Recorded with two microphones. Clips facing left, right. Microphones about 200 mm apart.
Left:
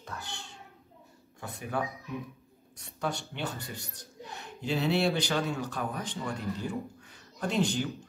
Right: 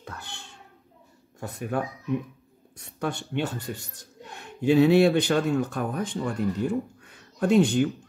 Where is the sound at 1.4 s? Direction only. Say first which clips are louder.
Right 5 dB; 50° right (ahead or behind).